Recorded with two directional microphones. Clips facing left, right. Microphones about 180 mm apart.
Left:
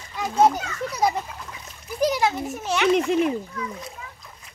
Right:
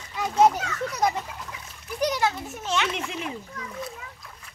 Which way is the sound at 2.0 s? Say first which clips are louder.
Left 3 dB; 10° left (ahead or behind).